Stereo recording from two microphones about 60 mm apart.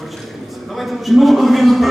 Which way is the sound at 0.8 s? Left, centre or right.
Centre.